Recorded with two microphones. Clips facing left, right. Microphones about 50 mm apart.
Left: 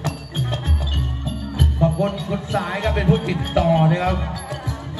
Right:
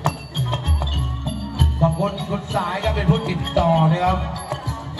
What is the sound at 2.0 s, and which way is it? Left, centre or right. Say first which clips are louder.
Music: left 1 dB; left.